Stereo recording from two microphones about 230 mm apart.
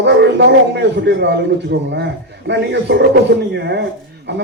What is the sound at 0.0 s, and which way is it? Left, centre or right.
A man's voice, right.